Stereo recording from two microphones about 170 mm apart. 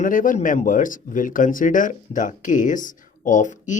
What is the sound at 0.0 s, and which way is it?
Speech, 50° left (ahead or behind).